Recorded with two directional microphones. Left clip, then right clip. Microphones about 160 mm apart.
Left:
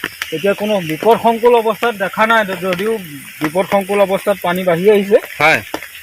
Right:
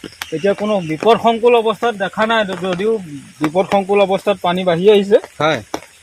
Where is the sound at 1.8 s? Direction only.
35° right (ahead or behind).